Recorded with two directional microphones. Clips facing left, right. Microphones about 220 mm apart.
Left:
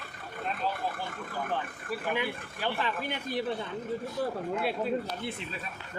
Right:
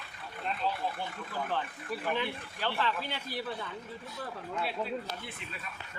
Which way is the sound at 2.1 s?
15° left (ahead or behind).